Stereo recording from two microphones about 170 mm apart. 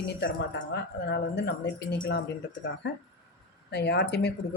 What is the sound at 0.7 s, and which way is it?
Speech, 80° left.